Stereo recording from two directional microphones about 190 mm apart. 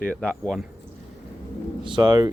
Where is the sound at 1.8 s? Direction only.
25° right (ahead or behind).